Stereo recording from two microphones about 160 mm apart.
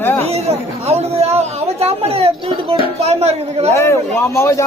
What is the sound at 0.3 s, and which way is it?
Speech, 40° right (ahead or behind).